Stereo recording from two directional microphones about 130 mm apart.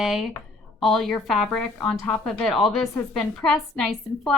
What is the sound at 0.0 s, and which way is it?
A woman's voice, 5° right (ahead or behind).